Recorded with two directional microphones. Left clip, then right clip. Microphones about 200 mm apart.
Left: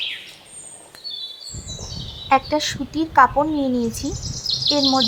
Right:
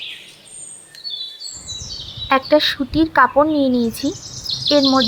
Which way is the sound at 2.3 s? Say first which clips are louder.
Right 4 dB; 10° right (ahead or behind).